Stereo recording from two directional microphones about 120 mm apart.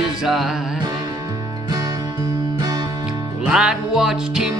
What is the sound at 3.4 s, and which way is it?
Music, 5° right (ahead or behind).